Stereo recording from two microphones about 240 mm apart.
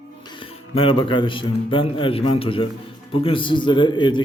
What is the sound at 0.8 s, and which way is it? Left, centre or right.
A man's voice, left.